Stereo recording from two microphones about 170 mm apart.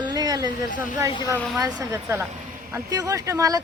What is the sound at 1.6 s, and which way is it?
Speech, 15° right (ahead or behind).